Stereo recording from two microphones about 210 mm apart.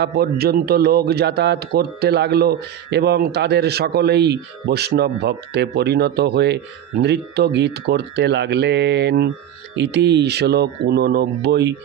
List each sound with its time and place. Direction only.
0.0 s a man's voice: 50° right (ahead or behind)